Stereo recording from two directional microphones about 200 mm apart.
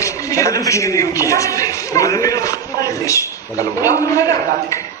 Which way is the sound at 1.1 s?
15° left (ahead or behind).